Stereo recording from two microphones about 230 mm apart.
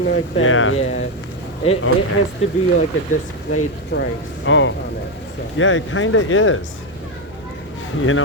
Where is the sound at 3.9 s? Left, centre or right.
Left.